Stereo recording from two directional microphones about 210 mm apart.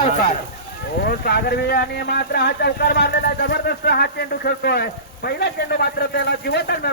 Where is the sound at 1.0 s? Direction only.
45° left (ahead or behind).